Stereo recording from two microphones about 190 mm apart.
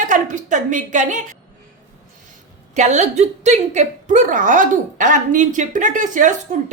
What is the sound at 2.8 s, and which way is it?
Speech, 40° right (ahead or behind).